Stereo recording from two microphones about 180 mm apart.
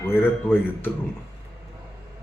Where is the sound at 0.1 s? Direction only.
10° left (ahead or behind).